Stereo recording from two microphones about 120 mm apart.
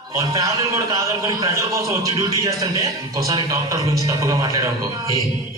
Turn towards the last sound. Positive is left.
turn(degrees=-25)  # may be behind; listen again after turning